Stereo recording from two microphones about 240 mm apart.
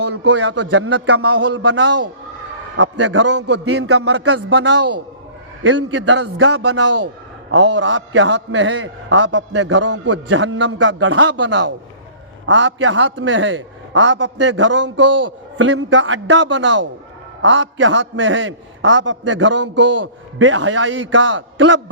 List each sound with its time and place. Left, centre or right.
0.0 s a man's voice: right